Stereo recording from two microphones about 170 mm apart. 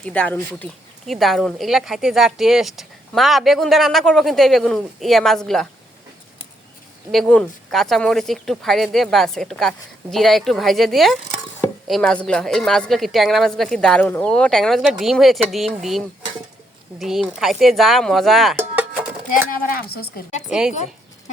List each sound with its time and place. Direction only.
0.0 s speech: 5° left (ahead or behind)
7.1 s speech: 5° left (ahead or behind)
18.5 s music: 10° right (ahead or behind)
19.7 s speech: 65° left (ahead or behind)
20.5 s speech: 5° right (ahead or behind)
20.7 s a sound: 45° left (ahead or behind)